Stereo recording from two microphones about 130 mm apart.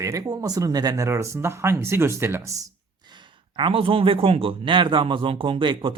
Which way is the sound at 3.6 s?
45° right (ahead or behind).